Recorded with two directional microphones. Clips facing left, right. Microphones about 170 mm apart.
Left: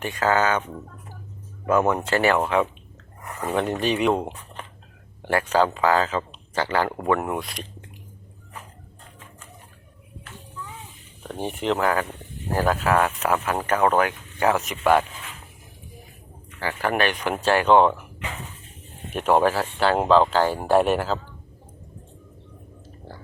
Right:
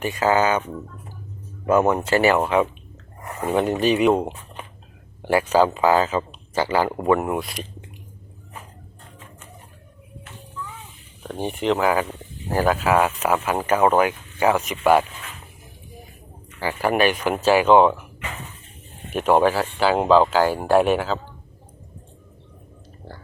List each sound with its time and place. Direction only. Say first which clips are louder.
0.0 s speech: right 2 dB; 10° right (ahead or behind)
1.6 s speech: right 3 dB; 15° right (ahead or behind)
11.3 s speech: right 3 dB; centre (ahead or behind)
16.6 s speech: right 3 dB; 10° right (ahead or behind)
19.1 s speech: right 2 dB; centre (ahead or behind)